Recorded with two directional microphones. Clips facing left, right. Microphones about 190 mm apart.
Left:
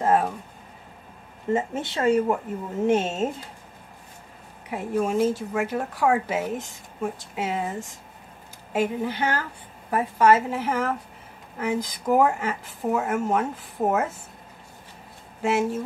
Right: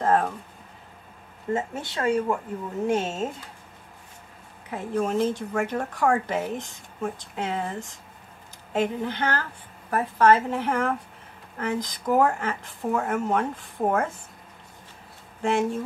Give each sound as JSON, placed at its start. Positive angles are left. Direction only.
{"t": 0.0, "sound": "speech", "side_deg": 10}
{"t": 1.5, "sound": "a woman's voice", "side_deg": 20}
{"t": 4.6, "sound": "speech", "side_deg": 10}
{"t": 15.4, "sound": "speech", "side_deg": 5}